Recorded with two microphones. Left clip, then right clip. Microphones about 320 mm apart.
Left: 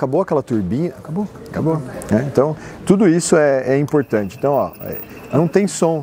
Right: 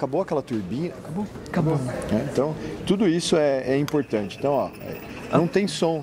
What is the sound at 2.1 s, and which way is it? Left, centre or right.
Speech, left.